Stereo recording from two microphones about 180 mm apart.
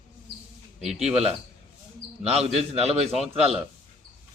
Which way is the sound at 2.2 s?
35° right (ahead or behind).